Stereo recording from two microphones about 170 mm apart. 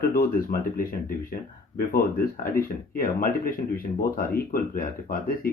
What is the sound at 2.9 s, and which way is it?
Speech, 60° left (ahead or behind).